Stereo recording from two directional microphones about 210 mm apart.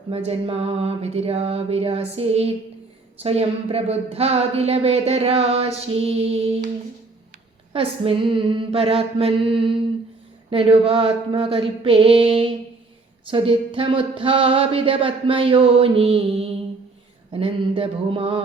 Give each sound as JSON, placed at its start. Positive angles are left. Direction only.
{"t": 0.1, "sound": "speech", "side_deg": -30}
{"t": 7.7, "sound": "speech", "side_deg": -25}